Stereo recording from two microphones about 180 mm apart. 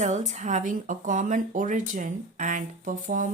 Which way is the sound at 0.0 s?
40° right (ahead or behind).